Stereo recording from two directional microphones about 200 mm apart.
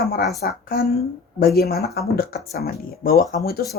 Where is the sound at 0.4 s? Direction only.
50° left (ahead or behind).